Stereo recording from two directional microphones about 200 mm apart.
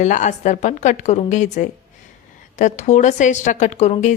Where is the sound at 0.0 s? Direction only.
35° left (ahead or behind).